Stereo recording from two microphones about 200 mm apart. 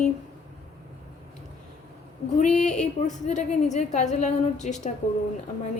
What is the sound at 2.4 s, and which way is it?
A woman's voice, 35° left (ahead or behind).